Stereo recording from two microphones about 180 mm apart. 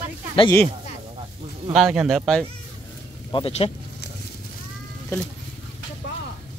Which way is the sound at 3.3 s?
30° left (ahead or behind).